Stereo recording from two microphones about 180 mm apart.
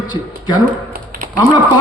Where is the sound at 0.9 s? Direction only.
50° right (ahead or behind).